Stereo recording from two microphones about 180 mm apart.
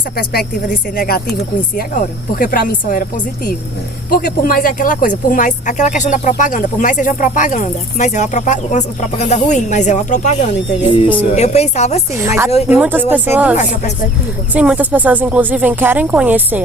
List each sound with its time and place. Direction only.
0.2 s speech: 55° left (ahead or behind); by 12.0 s 40° left (ahead or behind)
12.1 s speech: 15° right (ahead or behind)